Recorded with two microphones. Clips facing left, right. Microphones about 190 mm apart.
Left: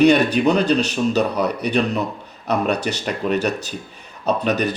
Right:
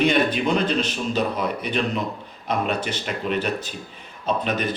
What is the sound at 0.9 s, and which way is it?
Speech, 75° left (ahead or behind).